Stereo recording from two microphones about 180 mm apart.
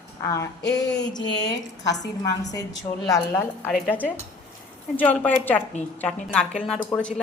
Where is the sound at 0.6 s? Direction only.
75° left (ahead or behind).